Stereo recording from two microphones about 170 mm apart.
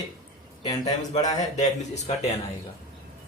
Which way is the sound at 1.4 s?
45° left (ahead or behind).